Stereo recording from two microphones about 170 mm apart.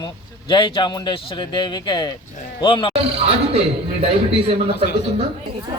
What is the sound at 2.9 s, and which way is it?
Speech, 35° right (ahead or behind).